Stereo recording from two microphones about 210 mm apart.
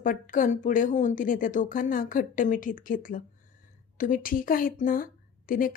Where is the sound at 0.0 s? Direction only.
40° left (ahead or behind).